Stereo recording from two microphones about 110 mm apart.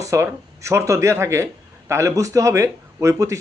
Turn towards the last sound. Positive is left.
turn(degrees=-30)  # may be behind; listen again after turning